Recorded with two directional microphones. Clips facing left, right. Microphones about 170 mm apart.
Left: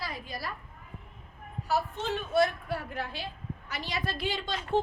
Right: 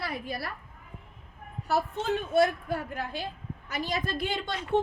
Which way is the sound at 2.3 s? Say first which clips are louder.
Right 1 dB; 50° right (ahead or behind).